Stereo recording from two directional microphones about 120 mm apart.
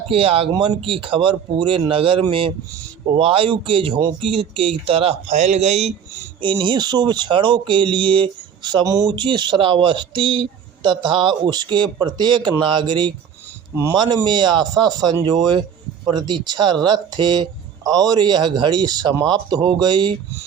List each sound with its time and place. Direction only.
0.1 s speech: 50° right (ahead or behind)
5.3 s a man's voice: 70° right (ahead or behind)
6.4 s speech: 40° right (ahead or behind)
14.3 s speech: 40° right (ahead or behind)